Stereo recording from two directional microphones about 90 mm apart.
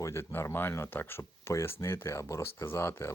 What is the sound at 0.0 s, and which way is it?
Speech, 30° left (ahead or behind).